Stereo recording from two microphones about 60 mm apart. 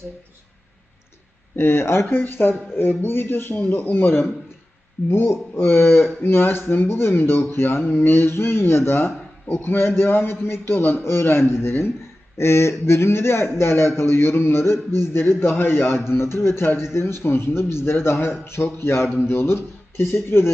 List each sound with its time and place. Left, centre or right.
1.5 s speech: left
3.8 s a man's voice: left
4.0 s a man's voice: left
19.0 s a man's voice: centre
19.3 s speech: left